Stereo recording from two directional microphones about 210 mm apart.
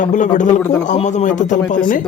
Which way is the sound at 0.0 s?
35° left (ahead or behind).